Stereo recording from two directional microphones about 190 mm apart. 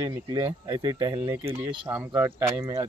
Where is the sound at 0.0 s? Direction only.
15° right (ahead or behind).